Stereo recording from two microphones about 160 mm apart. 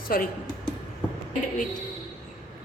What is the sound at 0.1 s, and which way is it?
Speech, 65° left (ahead or behind).